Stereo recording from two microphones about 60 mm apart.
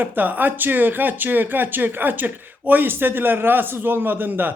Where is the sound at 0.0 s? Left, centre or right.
Right.